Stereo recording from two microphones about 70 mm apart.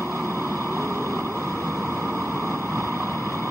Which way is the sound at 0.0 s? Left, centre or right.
Right.